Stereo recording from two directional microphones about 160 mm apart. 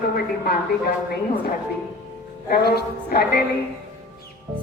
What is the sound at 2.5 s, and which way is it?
Speech, 75° left (ahead or behind).